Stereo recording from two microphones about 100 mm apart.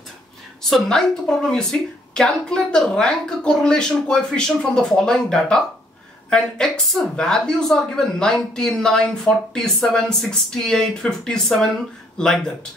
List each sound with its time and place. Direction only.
0.7 s speech: 5° left (ahead or behind)